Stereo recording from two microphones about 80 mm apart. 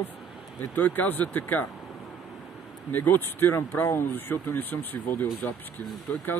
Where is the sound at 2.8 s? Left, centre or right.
Left.